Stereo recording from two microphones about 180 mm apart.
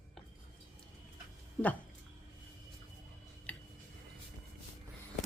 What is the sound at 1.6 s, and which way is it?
Speech, 5° left (ahead or behind).